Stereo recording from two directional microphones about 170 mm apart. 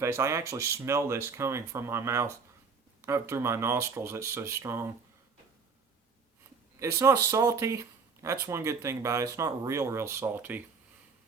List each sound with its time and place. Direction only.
0.0 s speech: 15° right (ahead or behind)
6.7 s speech: 15° right (ahead or behind)